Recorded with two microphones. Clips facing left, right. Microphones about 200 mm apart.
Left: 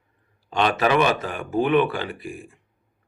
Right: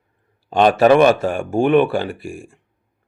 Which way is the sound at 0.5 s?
50° right (ahead or behind).